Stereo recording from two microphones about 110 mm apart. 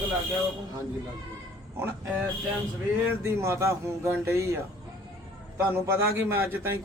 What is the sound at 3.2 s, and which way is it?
Speech, 25° right (ahead or behind).